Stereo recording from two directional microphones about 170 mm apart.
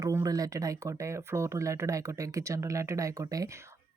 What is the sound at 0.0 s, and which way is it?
Speech, 20° right (ahead or behind).